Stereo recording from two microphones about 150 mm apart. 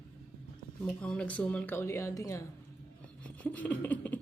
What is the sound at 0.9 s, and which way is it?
Speech, 10° left (ahead or behind).